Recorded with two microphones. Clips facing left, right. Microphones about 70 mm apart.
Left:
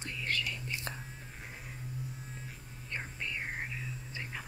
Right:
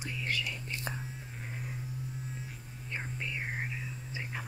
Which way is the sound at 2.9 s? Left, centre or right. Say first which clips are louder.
Right 1 dB; centre.